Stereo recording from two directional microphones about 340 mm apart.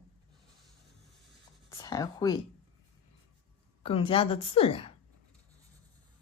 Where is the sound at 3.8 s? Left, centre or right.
Centre.